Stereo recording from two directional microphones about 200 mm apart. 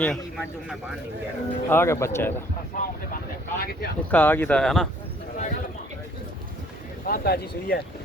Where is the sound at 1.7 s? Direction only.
10° left (ahead or behind).